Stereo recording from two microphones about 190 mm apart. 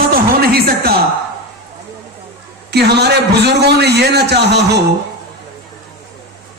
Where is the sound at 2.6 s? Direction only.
60° right (ahead or behind).